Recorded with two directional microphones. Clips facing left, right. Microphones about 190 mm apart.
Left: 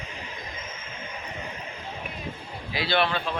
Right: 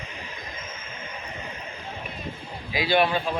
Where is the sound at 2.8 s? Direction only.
15° right (ahead or behind).